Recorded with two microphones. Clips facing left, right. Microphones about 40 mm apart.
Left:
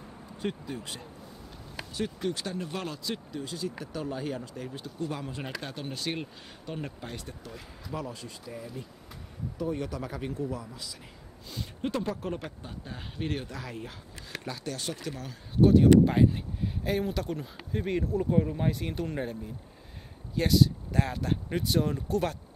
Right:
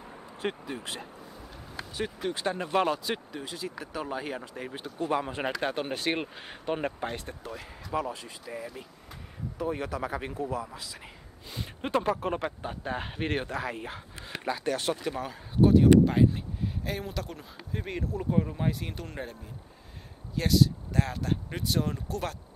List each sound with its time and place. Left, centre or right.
0.4 s speech: right
1.5 s a sound: centre
2.4 s speech: right
3.3 s speech: centre
4.6 s speech: right; by 10.0 s centre
10.0 s speech: right
10.3 s speech: centre
10.6 s speech: right
15.6 s speech: centre
20.3 s speech: centre